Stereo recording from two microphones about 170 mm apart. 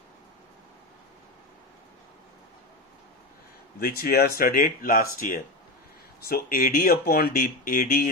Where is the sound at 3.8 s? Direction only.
60° left (ahead or behind).